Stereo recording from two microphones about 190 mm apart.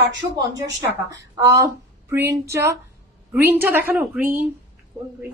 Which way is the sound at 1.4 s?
15° right (ahead or behind).